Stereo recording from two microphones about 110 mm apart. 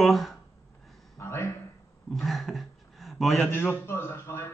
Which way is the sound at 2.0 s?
Centre (ahead or behind).